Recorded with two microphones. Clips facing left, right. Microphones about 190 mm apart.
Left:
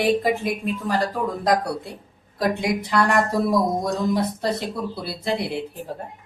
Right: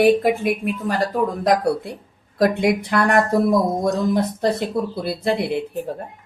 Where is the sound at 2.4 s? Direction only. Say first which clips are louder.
Right 5 dB; 55° right (ahead or behind).